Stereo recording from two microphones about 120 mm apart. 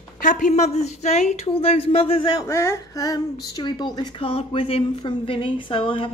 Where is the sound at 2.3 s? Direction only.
25° left (ahead or behind).